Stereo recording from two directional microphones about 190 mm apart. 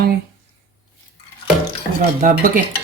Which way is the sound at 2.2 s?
45° right (ahead or behind).